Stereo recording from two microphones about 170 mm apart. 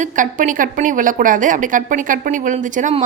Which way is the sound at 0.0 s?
50° right (ahead or behind).